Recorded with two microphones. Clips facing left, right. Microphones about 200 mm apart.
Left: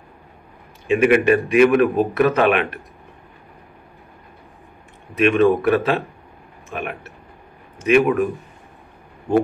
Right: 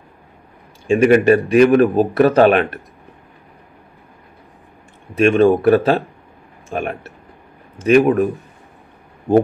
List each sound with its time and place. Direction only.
0.8 s a man's voice: 40° right (ahead or behind)
5.1 s a man's voice: 30° right (ahead or behind)